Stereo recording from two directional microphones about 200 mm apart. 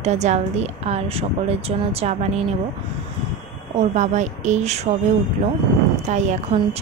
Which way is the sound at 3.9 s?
35° right (ahead or behind).